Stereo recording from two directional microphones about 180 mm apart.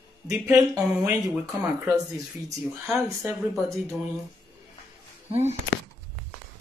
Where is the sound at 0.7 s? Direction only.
10° right (ahead or behind).